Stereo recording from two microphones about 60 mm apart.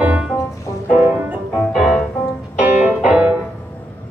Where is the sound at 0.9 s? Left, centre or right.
Right.